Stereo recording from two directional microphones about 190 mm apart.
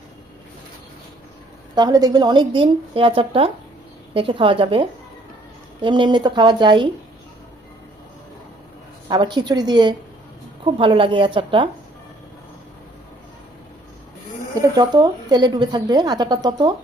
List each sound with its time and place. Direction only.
1.7 s a woman's voice: 20° right (ahead or behind)
9.0 s a woman's voice: 25° right (ahead or behind)
14.5 s a woman's voice: 20° right (ahead or behind)